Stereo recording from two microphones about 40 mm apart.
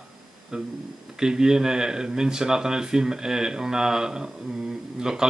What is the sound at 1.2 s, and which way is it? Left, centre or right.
Speech, centre.